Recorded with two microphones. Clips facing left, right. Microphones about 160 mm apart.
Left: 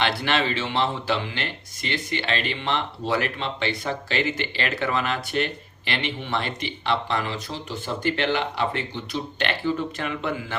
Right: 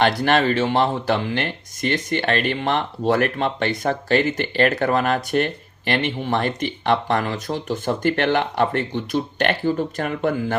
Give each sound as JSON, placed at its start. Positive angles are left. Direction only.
{"t": 0.0, "sound": "speech", "side_deg": -45}